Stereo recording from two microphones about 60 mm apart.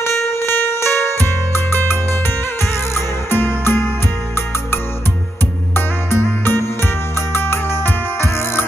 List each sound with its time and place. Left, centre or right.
0.0 s music: left
3.3 s music: left
5.8 s music: left